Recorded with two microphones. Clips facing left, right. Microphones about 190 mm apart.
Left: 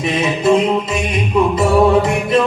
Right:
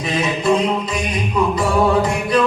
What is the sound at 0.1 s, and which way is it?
Music, 25° left (ahead or behind).